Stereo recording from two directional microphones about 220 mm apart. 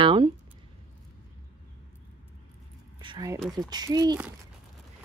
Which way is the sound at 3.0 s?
20° right (ahead or behind).